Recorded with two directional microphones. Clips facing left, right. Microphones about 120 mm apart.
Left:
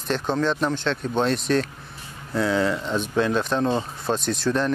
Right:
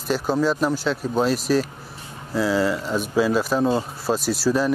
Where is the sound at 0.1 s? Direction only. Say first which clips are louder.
Right 2 dB; 5° right (ahead or behind).